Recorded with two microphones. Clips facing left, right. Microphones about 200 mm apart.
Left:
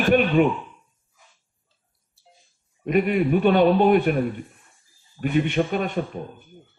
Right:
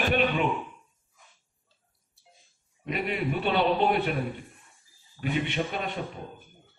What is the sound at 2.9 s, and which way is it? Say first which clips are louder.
A man's voice: left 10 dB; 50° left (ahead or behind).